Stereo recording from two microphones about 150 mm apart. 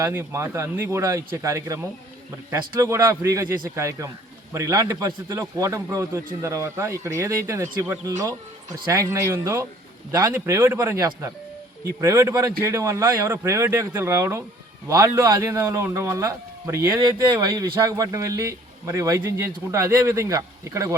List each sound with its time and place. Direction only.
0.0 s a man's voice: 15° right (ahead or behind)